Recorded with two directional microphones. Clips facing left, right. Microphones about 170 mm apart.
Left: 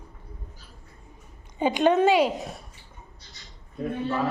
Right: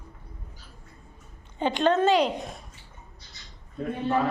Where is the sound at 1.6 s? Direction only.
10° left (ahead or behind).